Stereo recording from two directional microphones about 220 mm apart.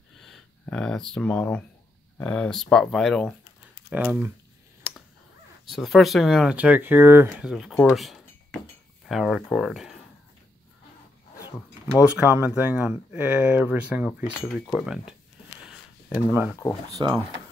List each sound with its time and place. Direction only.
0.2 s speech: 5° left (ahead or behind)
5.7 s speech: centre (ahead or behind)
12.0 s speech: 5° right (ahead or behind)
16.3 s speech: 10° right (ahead or behind)
16.9 s speech: 20° right (ahead or behind)